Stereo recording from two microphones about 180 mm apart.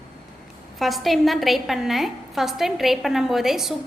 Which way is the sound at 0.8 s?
Centre (ahead or behind).